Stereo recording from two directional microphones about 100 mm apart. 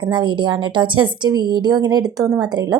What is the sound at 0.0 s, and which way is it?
A woman's voice, 50° right (ahead or behind).